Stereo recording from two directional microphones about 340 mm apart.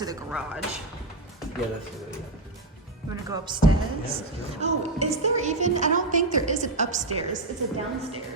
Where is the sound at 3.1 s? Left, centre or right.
Centre.